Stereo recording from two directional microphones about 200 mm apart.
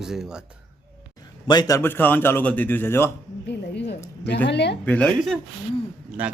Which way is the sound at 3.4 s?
60° left (ahead or behind).